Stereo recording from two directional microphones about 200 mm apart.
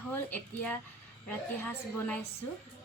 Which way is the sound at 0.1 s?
10° left (ahead or behind).